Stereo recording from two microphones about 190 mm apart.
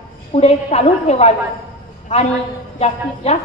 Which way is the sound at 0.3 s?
35° left (ahead or behind).